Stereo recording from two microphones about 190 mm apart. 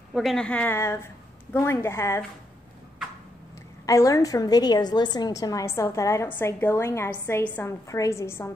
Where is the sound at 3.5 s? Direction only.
15° left (ahead or behind).